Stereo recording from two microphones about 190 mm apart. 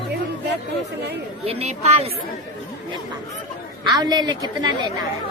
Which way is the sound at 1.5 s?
35° right (ahead or behind).